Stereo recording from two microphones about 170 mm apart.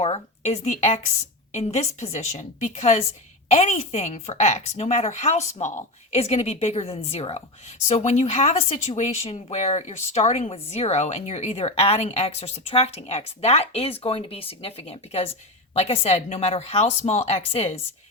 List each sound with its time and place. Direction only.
0.0 s a woman's voice: 40° left (ahead or behind)